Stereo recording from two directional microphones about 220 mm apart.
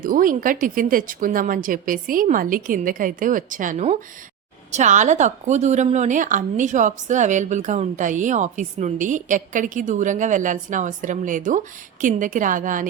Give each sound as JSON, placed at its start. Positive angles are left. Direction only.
{"t": 0.0, "sound": "a woman's voice", "side_deg": -40}